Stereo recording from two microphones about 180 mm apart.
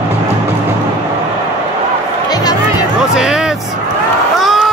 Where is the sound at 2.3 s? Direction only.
20° left (ahead or behind).